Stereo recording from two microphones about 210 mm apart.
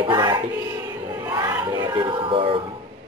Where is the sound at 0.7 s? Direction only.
15° right (ahead or behind).